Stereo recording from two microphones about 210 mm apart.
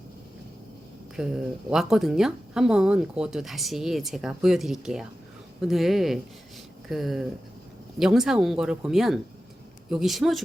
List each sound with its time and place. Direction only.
1.1 s speech: 5° right (ahead or behind)